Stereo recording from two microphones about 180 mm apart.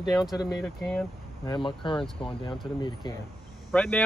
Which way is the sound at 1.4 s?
25° left (ahead or behind).